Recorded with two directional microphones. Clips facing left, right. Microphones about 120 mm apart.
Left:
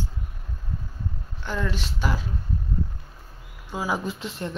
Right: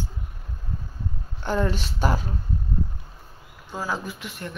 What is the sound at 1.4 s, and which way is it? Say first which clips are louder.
Speech: right 4 dB; 40° right (ahead or behind).